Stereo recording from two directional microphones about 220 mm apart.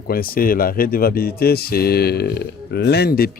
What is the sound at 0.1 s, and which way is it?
Speech, 40° left (ahead or behind).